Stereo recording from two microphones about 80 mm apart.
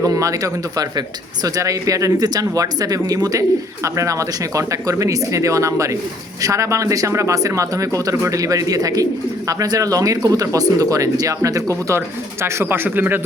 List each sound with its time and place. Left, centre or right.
0.0 s speech: right